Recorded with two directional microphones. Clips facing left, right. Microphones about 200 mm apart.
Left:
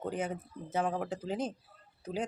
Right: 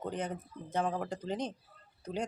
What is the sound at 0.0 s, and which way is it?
Speech, 5° left (ahead or behind).